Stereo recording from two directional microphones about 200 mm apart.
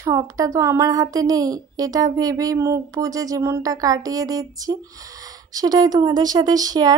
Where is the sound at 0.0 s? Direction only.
15° right (ahead or behind).